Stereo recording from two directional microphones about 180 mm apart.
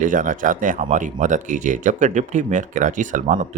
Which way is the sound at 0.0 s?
45° right (ahead or behind).